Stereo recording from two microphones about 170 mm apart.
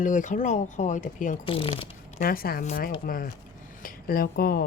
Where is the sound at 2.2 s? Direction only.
60° left (ahead or behind).